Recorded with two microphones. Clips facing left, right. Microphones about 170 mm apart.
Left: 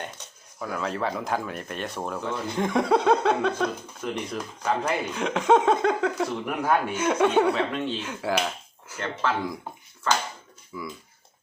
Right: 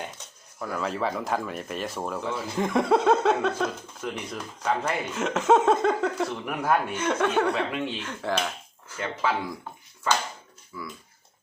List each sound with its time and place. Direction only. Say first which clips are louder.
0.6 s speech: even; centre (ahead or behind)
7.5 s speech: left 1 dB; 5° right (ahead or behind)
8.0 s speech: left 2 dB; 10° left (ahead or behind)
10.7 s speech: left 3 dB; 15° left (ahead or behind)